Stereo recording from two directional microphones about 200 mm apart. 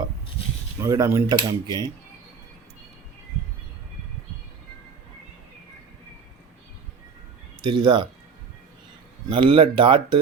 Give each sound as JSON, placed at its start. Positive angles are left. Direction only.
{"t": 0.8, "sound": "speech", "side_deg": -15}
{"t": 7.6, "sound": "speech", "side_deg": -25}
{"t": 9.3, "sound": "speech", "side_deg": -25}